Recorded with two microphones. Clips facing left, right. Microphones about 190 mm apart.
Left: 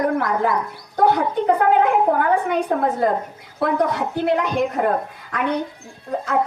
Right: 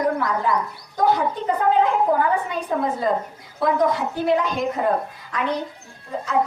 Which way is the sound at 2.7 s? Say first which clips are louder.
Even; 55° left (ahead or behind).